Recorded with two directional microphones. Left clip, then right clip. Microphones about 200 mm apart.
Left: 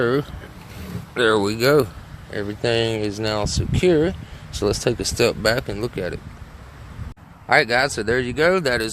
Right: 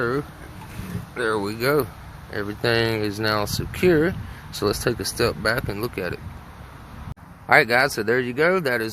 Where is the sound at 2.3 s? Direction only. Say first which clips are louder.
Left 1 dB; 10° left (ahead or behind).